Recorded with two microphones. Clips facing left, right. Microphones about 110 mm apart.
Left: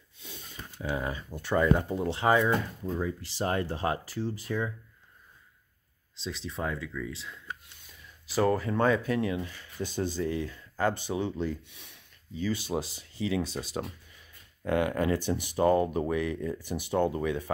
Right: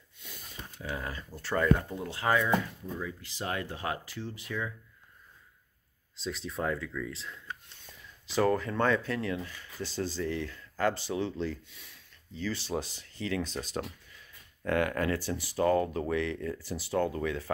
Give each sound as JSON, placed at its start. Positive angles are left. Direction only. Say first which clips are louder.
{"t": 0.2, "sound": "speech", "louder": "left 1 dB", "side_deg": 30}
{"t": 1.9, "sound": "speech", "louder": "left 4 dB", "side_deg": 25}
{"t": 6.1, "sound": "speech", "louder": "right 1 dB", "side_deg": 0}
{"t": 14.6, "sound": "speech", "louder": "left 2 dB", "side_deg": 20}